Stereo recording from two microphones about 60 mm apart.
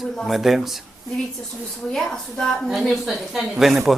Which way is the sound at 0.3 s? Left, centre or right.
Centre.